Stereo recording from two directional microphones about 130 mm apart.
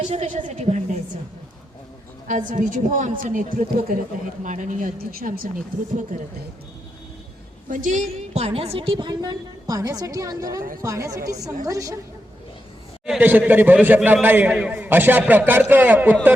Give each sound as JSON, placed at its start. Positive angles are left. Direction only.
{"t": 0.1, "sound": "a woman's voice", "side_deg": -60}
{"t": 2.2, "sound": "a woman's voice", "side_deg": -75}
{"t": 4.4, "sound": "a woman's voice", "side_deg": -75}
{"t": 5.9, "sound": "a woman's voice", "side_deg": -75}
{"t": 7.7, "sound": "a woman's voice", "side_deg": -80}
{"t": 8.1, "sound": "a woman's voice", "side_deg": -55}
{"t": 13.1, "sound": "a man's voice", "side_deg": -15}